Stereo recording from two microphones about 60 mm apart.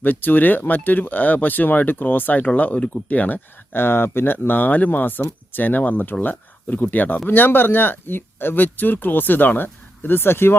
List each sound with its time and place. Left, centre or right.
0.0 s speech: left